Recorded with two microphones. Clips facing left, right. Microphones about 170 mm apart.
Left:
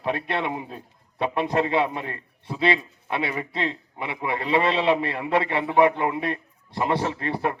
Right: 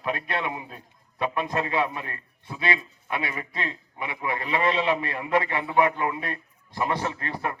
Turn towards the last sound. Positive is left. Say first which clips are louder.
# left 5 dB
turn(degrees=25)  # may be behind; listen again after turning